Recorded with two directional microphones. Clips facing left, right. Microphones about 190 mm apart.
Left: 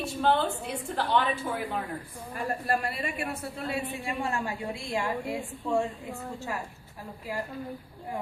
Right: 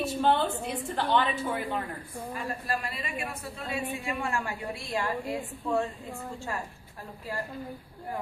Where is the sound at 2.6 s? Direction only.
60° left (ahead or behind).